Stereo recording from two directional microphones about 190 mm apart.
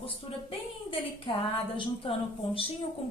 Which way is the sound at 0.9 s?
25° left (ahead or behind).